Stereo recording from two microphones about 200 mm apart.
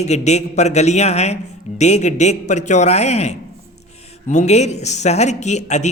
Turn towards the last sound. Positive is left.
turn(degrees=35)  # may be behind; listen again after turning